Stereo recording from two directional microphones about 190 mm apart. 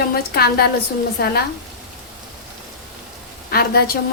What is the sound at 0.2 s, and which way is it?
A woman's voice, 55° left (ahead or behind).